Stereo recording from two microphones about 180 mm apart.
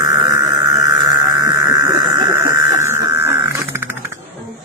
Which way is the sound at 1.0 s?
20° right (ahead or behind).